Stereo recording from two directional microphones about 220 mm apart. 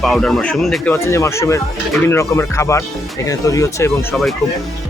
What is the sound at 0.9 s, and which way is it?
Speech, 10° left (ahead or behind).